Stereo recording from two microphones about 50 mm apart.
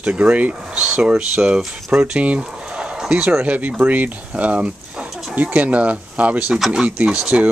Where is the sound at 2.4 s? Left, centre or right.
Right.